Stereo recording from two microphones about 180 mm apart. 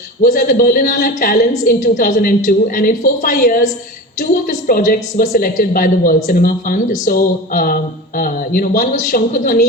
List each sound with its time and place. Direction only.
0.2 s a woman's voice: 50° left (ahead or behind)